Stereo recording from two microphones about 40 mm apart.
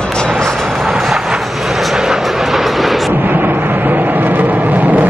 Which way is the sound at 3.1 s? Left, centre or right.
Right.